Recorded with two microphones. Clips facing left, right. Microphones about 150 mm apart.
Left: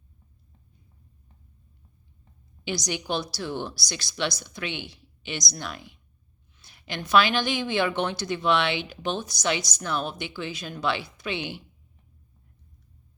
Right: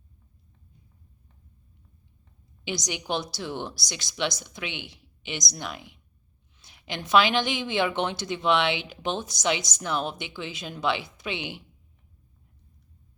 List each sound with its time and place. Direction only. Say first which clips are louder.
2.6 s a woman's voice: left 1 dB; 20° right (ahead or behind)